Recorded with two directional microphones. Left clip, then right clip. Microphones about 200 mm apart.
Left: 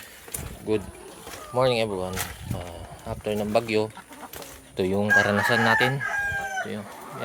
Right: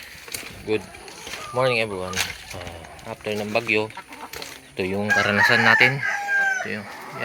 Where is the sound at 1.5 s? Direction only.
15° left (ahead or behind).